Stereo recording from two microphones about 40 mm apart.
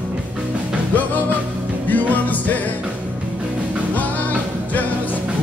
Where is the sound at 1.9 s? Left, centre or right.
Left.